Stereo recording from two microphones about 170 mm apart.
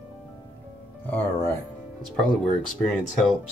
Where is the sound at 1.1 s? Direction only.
10° left (ahead or behind).